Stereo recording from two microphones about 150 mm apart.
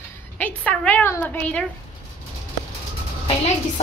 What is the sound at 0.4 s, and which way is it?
A woman's voice, 10° left (ahead or behind).